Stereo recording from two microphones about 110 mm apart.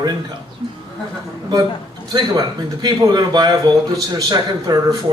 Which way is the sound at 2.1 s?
40° right (ahead or behind).